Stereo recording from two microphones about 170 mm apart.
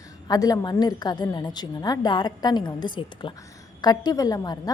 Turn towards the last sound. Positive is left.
turn(degrees=20)  # may be behind; listen again after turning